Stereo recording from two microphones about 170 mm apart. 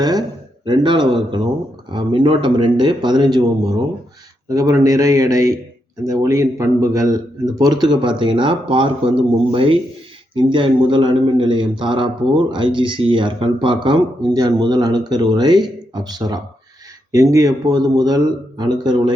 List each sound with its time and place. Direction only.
0.0 s a man's voice: 25° right (ahead or behind)